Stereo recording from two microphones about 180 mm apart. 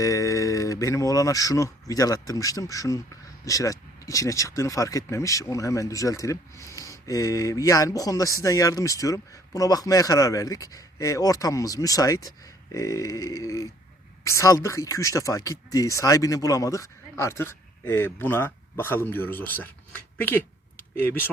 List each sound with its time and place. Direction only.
0.0 s speech: 20° left (ahead or behind)